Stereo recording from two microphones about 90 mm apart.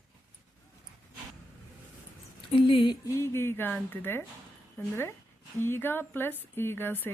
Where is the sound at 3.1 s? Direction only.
35° left (ahead or behind).